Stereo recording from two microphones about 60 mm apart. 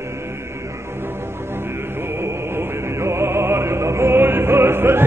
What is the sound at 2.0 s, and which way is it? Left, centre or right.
Music, right.